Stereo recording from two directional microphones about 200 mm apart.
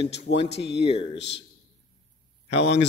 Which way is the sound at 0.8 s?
30° left (ahead or behind).